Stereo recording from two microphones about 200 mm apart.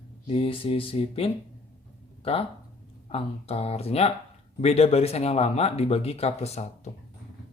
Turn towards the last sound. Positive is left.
turn(degrees=30)  # may be behind; listen again after turning